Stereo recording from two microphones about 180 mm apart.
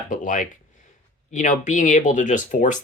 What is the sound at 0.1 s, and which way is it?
Speech, 45° left (ahead or behind).